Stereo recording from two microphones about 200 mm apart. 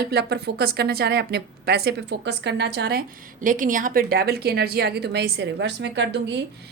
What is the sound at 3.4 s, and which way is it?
A woman's voice, 40° right (ahead or behind).